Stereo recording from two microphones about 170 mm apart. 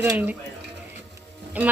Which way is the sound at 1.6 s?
10° right (ahead or behind).